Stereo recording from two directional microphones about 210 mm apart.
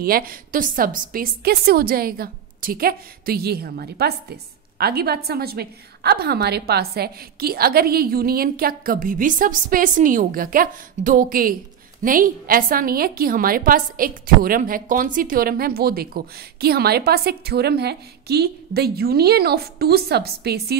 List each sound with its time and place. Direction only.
0.0 s a woman's voice: 45° right (ahead or behind)